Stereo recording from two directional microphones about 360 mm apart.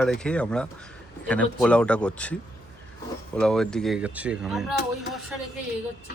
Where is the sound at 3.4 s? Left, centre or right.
Centre.